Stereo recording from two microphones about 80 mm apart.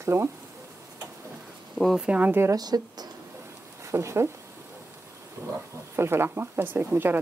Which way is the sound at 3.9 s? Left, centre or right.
Right.